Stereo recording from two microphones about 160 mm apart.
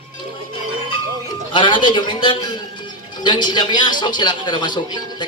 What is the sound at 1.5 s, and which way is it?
A man's voice, 30° left (ahead or behind).